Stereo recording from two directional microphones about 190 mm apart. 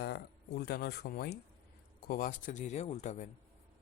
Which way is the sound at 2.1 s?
45° left (ahead or behind).